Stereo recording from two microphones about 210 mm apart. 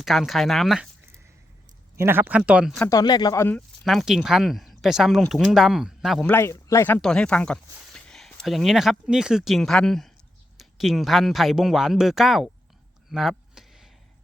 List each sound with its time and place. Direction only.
0.0 s speech: centre (ahead or behind)
2.0 s speech: 10° right (ahead or behind)
2.7 s speech: 5° left (ahead or behind)
3.0 s speech: 20° left (ahead or behind)
3.8 s speech: centre (ahead or behind)
6.3 s speech: 10° left (ahead or behind)
13.1 s a sound: centre (ahead or behind)